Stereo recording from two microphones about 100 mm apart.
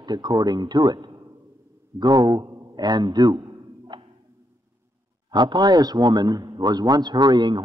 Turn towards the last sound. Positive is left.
turn(degrees=-45)  # may be behind; listen again after turning